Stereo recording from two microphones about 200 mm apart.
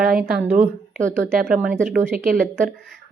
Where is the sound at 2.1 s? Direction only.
40° right (ahead or behind).